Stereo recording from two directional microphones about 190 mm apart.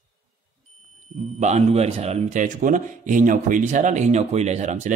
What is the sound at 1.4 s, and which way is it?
A man's voice, 35° right (ahead or behind).